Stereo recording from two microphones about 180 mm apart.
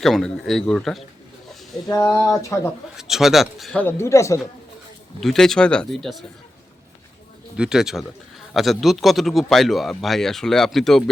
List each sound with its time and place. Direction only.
0.0 s speech: centre (ahead or behind)
1.9 s speech: 20° left (ahead or behind)
3.0 s speech: centre (ahead or behind); by 4.4 s 15° left (ahead or behind)
5.2 s speech: centre (ahead or behind)
7.5 s speech: 5° right (ahead or behind)